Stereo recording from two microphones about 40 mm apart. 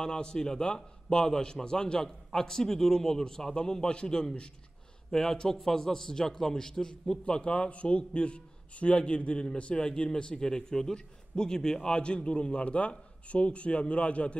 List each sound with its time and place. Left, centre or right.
0.0 s a man's voice: centre